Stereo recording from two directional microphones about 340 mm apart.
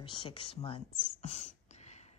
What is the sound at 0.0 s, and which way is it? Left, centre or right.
Speech, centre.